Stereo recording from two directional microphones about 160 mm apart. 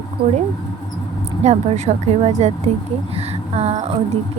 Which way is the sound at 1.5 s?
45° right (ahead or behind).